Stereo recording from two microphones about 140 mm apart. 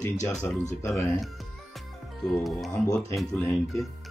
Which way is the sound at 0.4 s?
25° left (ahead or behind).